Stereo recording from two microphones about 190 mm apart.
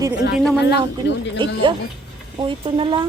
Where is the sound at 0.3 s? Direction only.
Centre (ahead or behind).